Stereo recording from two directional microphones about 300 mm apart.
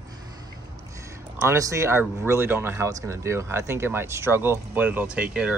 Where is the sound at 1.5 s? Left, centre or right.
Centre.